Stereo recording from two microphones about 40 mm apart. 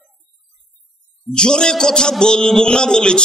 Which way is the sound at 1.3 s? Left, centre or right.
Centre.